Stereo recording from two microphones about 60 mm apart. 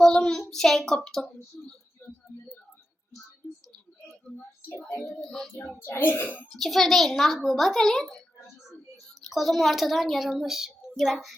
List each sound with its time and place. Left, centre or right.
0.0 s a child's voice: centre
2.0 s a sound: left
4.7 s speech: left
5.0 s a child's voice: centre
5.8 s a child's voice: left
6.5 s a child's voice: centre
9.3 s a child's voice: centre